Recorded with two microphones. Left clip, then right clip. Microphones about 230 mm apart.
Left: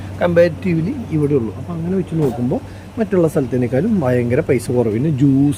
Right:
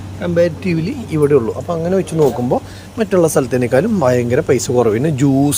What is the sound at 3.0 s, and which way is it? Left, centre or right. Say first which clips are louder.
Speech: right 3 dB; centre.